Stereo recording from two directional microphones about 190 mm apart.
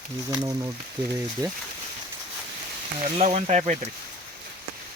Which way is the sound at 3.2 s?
35° right (ahead or behind).